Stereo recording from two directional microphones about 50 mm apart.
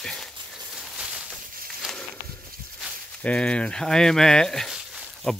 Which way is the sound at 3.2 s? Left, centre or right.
Left.